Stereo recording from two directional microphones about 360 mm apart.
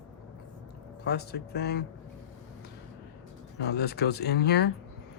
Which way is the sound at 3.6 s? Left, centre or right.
Left.